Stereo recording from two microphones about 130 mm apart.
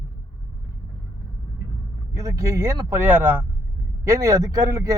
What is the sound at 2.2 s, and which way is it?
A man's voice, 25° right (ahead or behind).